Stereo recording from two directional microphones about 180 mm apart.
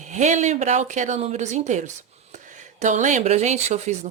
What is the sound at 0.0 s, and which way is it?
A woman's voice, 40° right (ahead or behind).